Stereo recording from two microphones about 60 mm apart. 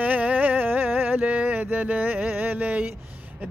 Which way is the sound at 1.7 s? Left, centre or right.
Right.